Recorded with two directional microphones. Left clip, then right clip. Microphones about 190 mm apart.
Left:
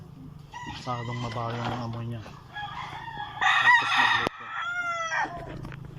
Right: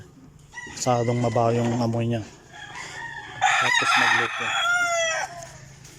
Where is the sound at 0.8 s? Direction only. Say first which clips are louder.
Right 13 dB; 90° right; by 2.2 s 60° right (ahead or behind).